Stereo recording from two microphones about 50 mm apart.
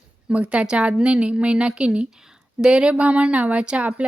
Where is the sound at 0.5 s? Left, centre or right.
Right.